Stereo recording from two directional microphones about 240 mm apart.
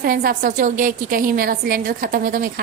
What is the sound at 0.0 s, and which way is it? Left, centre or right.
A woman's voice, right.